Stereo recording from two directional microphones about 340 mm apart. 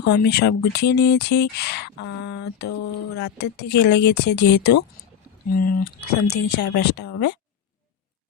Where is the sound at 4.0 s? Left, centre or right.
Left.